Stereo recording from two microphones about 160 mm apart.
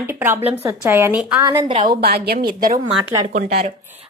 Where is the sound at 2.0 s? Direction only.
75° right (ahead or behind).